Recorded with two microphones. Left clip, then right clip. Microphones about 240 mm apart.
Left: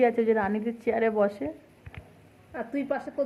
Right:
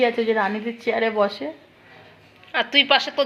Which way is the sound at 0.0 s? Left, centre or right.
Centre.